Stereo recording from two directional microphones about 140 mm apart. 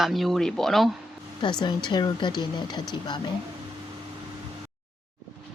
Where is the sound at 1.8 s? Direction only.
30° left (ahead or behind).